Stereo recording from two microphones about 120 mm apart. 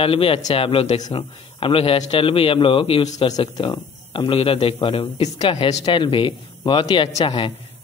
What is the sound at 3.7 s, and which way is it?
A man's voice, 50° left (ahead or behind).